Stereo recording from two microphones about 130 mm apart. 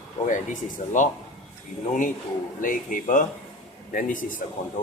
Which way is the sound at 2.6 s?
90° left.